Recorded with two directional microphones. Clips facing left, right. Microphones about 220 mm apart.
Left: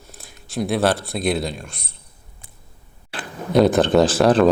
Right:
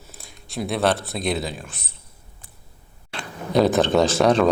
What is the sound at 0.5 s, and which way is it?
Speech, centre (ahead or behind).